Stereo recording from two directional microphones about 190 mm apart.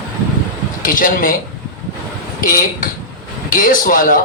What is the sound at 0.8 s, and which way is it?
Speech, 45° left (ahead or behind).